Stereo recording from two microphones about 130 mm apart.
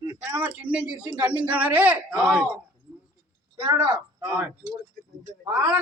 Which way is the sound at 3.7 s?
15° right (ahead or behind).